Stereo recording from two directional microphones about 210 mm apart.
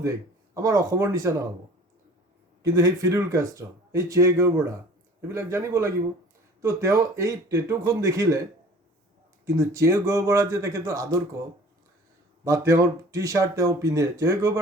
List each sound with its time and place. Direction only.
0.5 s speech: 15° right (ahead or behind)
2.6 s speech: 15° right (ahead or behind)
9.6 s speech: 15° right (ahead or behind)
12.5 s speech: 15° right (ahead or behind)